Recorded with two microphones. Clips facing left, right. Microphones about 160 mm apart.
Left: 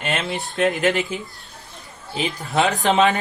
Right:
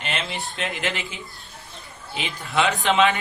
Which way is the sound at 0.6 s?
40° left (ahead or behind).